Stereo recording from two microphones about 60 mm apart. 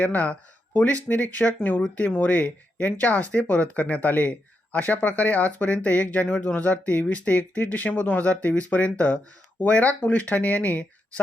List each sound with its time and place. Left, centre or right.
0.0 s speech: left